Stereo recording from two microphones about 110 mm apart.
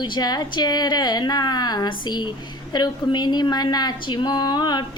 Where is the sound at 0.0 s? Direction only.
40° left (ahead or behind).